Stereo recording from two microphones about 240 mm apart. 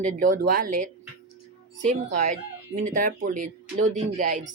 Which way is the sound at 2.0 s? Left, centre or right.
Right.